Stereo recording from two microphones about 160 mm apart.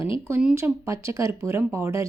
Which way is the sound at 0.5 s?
15° right (ahead or behind).